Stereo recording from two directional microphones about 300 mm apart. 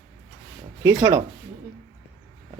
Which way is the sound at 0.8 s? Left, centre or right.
Centre.